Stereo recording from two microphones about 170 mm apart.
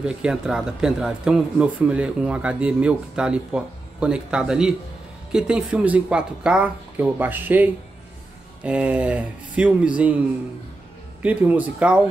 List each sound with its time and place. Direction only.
0.0 s speech: 5° right (ahead or behind)
11.2 s speech: 10° right (ahead or behind)